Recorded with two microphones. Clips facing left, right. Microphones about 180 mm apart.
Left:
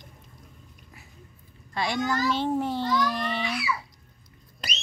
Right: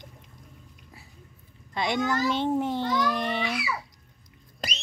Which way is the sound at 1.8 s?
20° right (ahead or behind).